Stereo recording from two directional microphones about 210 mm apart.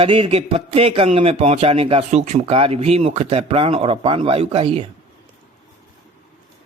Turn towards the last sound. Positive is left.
turn(degrees=-25)  # may be behind; listen again after turning